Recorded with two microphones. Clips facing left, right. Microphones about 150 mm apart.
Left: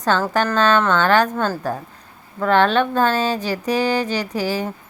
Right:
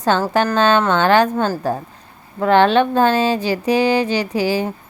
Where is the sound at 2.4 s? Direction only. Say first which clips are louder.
Right 3 dB; 30° right (ahead or behind).